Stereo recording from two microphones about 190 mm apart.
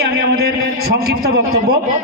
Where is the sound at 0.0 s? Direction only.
55° right (ahead or behind).